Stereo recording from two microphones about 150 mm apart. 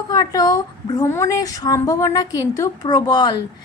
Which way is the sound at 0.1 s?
25° left (ahead or behind).